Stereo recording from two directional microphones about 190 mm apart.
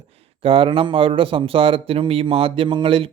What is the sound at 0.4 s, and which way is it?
A man's voice, 25° right (ahead or behind).